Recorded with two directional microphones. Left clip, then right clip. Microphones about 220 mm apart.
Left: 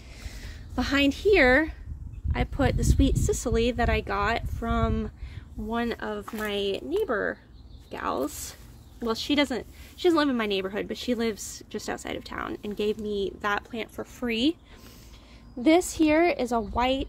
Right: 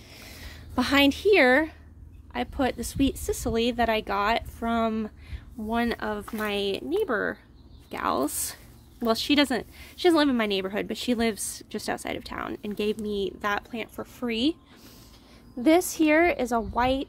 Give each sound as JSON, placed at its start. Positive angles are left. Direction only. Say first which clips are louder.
{"t": 0.1, "sound": "a sound", "louder": "right 1 dB", "side_deg": -15}
{"t": 2.3, "sound": "a woman's voice", "louder": "even", "side_deg": 0}
{"t": 15.6, "sound": "a woman's voice", "louder": "even", "side_deg": -10}